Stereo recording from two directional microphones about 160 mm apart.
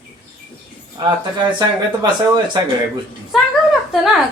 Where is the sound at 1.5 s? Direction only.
25° right (ahead or behind).